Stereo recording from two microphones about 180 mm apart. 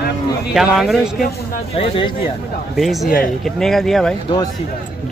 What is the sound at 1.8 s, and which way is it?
Speech, 30° left (ahead or behind).